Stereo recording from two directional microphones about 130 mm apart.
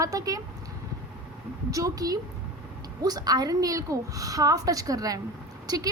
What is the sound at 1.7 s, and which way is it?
A woman's voice, 25° right (ahead or behind).